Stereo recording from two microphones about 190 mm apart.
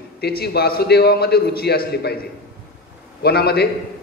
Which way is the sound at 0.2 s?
55° left (ahead or behind).